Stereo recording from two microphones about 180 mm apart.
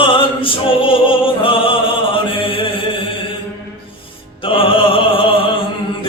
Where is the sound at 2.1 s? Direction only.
30° left (ahead or behind).